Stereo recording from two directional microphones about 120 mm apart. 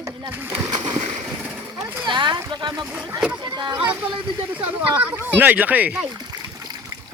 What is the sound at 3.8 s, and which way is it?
Speech, 10° right (ahead or behind).